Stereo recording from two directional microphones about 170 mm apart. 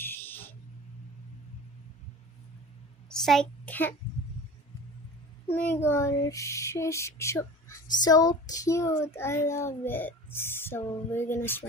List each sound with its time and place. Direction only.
0.0 s a sound: 10° left (ahead or behind)
3.1 s a child's voice: centre (ahead or behind)
5.5 s speech: 10° left (ahead or behind)